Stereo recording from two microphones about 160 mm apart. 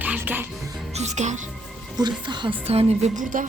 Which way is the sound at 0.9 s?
45° right (ahead or behind).